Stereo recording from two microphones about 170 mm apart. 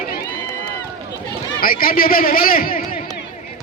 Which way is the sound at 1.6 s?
60° left (ahead or behind).